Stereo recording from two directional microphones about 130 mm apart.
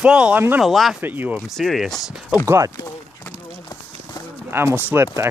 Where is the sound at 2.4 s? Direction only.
20° right (ahead or behind).